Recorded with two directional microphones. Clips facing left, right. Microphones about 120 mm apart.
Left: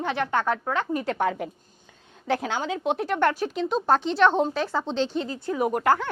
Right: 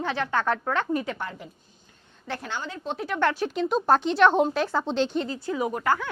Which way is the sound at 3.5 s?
Centre (ahead or behind).